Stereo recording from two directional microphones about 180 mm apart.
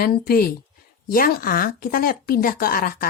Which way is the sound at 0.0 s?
55° left (ahead or behind).